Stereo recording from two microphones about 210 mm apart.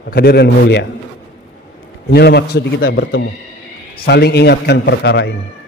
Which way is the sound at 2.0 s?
50° left (ahead or behind).